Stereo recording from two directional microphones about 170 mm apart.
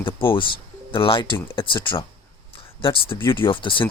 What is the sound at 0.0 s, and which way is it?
Speech, 30° left (ahead or behind).